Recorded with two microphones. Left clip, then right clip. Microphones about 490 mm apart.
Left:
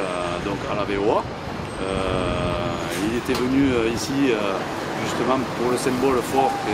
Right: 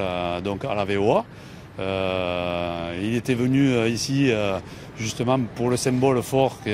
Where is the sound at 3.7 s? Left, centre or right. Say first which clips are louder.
Left 1 dB; right.